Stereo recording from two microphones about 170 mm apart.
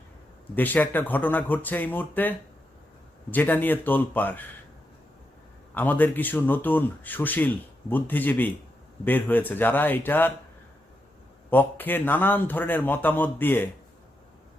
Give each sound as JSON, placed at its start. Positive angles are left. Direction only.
{"t": 0.5, "sound": "speech", "side_deg": 10}
{"t": 3.3, "sound": "speech", "side_deg": 10}
{"t": 5.7, "sound": "speech", "side_deg": 10}
{"t": 11.5, "sound": "speech", "side_deg": 10}